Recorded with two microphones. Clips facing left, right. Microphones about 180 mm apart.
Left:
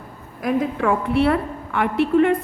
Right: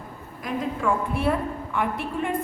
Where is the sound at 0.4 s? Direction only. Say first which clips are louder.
Left 6 dB; 70° left (ahead or behind).